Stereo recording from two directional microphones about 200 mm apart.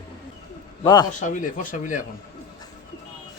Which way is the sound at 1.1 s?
40° left (ahead or behind).